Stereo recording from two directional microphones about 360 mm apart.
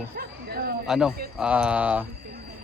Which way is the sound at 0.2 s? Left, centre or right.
Right.